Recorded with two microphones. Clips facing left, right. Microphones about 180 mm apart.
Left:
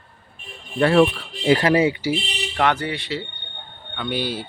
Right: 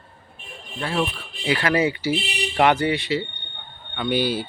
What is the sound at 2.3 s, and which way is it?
Speech, 10° right (ahead or behind).